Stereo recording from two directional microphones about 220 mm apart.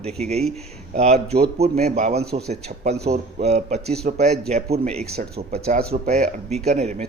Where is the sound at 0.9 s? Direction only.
30° right (ahead or behind).